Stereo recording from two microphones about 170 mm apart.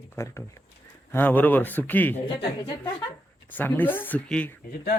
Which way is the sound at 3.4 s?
10° left (ahead or behind).